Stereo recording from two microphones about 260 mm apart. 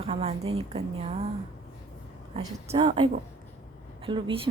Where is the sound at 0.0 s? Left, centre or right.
Right.